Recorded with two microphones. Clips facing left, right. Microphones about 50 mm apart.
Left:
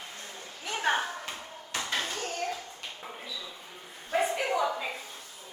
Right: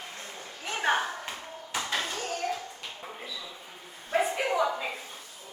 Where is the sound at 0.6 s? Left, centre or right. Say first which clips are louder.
Right 1 dB; centre.